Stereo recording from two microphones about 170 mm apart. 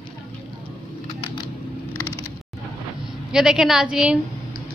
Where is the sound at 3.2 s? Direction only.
5° right (ahead or behind).